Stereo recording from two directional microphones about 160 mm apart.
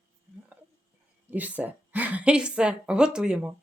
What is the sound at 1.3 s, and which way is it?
A woman's voice, 10° right (ahead or behind).